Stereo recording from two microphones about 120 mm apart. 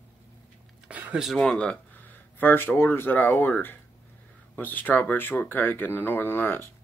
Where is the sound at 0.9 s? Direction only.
10° right (ahead or behind).